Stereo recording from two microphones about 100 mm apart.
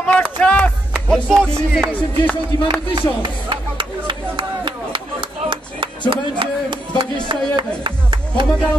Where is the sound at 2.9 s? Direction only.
50° right (ahead or behind).